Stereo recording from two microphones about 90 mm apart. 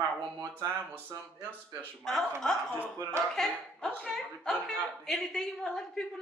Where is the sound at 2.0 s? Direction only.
5° left (ahead or behind).